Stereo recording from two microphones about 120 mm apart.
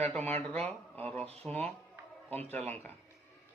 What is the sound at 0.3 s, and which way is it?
Speech, 60° right (ahead or behind).